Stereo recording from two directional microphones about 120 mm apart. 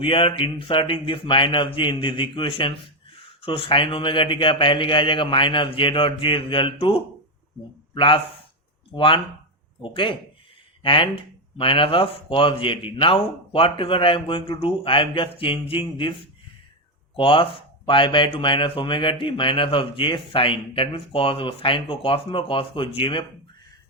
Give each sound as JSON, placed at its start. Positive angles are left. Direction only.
{"t": 0.0, "sound": "speech", "side_deg": 45}